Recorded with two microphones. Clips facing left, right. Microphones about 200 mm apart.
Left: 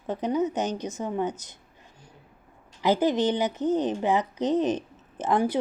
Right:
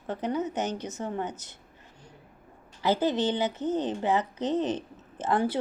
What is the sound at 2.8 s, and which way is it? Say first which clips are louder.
A woman's voice: left 3 dB; 15° left (ahead or behind).